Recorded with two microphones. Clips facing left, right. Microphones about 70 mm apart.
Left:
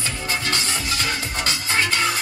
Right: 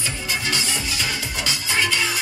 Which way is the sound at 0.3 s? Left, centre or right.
Left.